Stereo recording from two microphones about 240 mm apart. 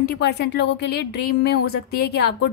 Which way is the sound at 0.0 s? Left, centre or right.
Left.